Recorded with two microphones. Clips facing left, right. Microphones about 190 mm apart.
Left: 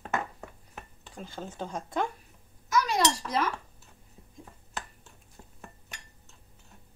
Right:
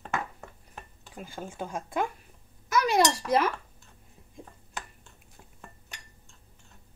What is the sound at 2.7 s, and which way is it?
Speech, 60° right (ahead or behind).